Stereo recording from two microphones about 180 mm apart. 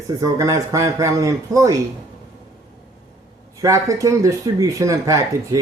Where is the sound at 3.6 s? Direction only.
15° right (ahead or behind).